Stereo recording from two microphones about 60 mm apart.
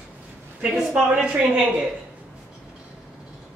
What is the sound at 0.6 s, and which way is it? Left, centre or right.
Speech, centre.